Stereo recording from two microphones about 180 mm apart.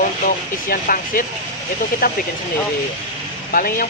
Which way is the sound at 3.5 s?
50° left (ahead or behind).